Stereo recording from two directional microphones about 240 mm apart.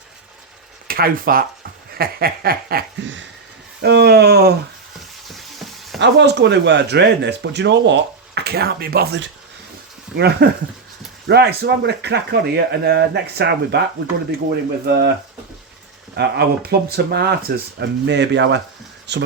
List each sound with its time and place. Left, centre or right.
0.9 s speech: right
5.3 s frying: centre
6.0 s speech: right
16.1 s speech: right